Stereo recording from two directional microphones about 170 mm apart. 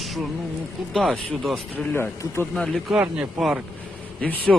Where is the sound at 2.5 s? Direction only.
Centre (ahead or behind).